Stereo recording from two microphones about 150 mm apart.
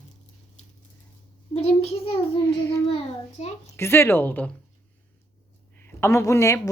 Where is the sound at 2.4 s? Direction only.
20° left (ahead or behind).